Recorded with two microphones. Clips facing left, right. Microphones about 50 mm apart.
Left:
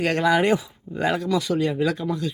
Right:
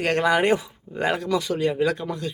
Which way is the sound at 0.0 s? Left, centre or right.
Right.